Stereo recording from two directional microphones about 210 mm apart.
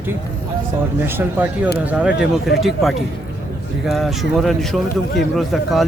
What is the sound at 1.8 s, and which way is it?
Speech, 5° right (ahead or behind).